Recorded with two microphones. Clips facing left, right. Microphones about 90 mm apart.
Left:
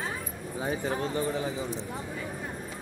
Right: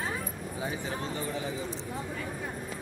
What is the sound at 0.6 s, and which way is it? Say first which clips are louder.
Speech: left 5 dB; 35° left (ahead or behind).